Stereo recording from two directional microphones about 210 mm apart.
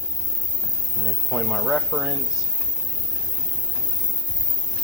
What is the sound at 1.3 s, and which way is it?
Speech, 5° left (ahead or behind).